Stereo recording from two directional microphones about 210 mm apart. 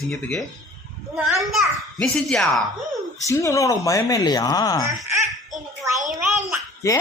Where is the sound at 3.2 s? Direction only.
15° left (ahead or behind).